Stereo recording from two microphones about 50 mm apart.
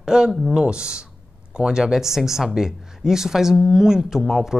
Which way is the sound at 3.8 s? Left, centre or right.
Centre.